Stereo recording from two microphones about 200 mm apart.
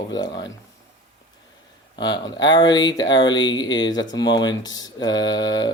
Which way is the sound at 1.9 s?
20° left (ahead or behind).